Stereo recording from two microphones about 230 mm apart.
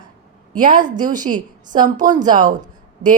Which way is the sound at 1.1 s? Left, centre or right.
Right.